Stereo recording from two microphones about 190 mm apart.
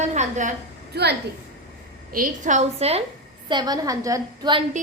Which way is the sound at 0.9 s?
60° right (ahead or behind).